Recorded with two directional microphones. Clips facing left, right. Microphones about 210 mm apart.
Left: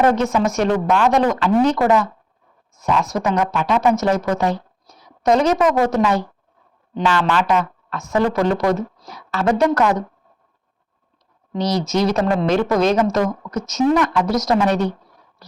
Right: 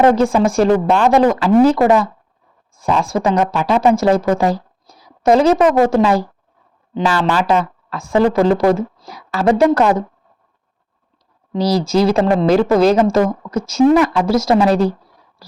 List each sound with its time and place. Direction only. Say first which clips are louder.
0.0 s a woman's voice: right 4 dB; 30° right (ahead or behind)
11.5 s a woman's voice: right 4 dB; 30° right (ahead or behind)